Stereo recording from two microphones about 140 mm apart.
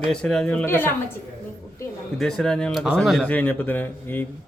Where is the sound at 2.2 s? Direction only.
5° left (ahead or behind).